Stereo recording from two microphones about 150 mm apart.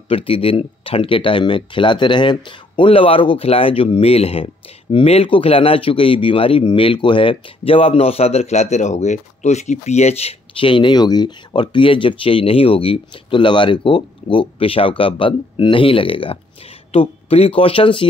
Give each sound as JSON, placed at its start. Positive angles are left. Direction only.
{"t": 0.1, "sound": "speech", "side_deg": 40}